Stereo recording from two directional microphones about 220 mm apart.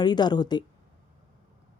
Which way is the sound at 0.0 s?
20° left (ahead or behind).